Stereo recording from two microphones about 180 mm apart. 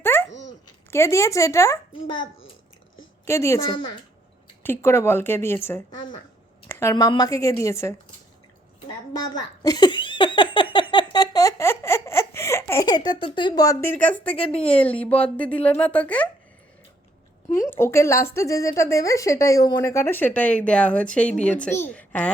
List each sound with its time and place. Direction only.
0.0 s babbling: 10° left (ahead or behind)
0.9 s speech: 15° left (ahead or behind)
3.2 s speech: 15° left (ahead or behind)
6.7 s a sound: 15° left (ahead or behind)
6.9 s speech: 25° left (ahead or behind)
9.2 s giggle: 25° left (ahead or behind)
13.1 s speech: 25° left (ahead or behind); by 14.3 s 10° left (ahead or behind)
14.3 s a woman's voice: 30° left (ahead or behind)
14.6 s speech: 5° left (ahead or behind)
17.5 s speech: 15° left (ahead or behind)